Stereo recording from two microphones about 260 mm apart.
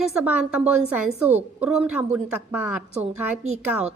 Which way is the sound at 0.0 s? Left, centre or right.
Centre.